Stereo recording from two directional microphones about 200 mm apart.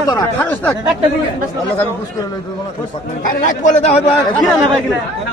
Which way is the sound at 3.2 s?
40° left (ahead or behind).